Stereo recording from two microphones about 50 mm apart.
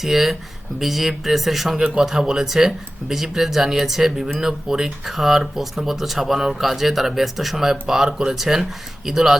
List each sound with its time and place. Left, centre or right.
0.0 s speech: centre